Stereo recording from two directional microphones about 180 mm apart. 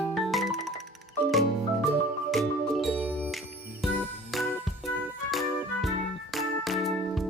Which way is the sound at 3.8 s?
Centre (ahead or behind).